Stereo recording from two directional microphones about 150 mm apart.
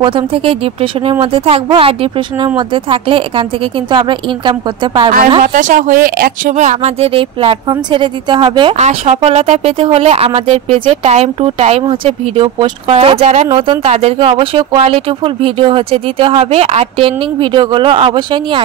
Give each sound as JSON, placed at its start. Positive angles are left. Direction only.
{"t": 0.0, "sound": "speech", "side_deg": -35}
{"t": 5.4, "sound": "speech", "side_deg": -60}
{"t": 6.5, "sound": "speech", "side_deg": -55}
{"t": 8.7, "sound": "speech", "side_deg": -45}